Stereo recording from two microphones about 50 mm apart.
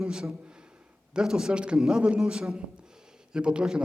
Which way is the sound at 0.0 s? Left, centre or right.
Centre.